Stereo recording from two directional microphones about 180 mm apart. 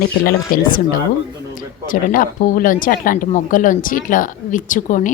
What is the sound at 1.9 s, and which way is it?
Speech, 50° left (ahead or behind).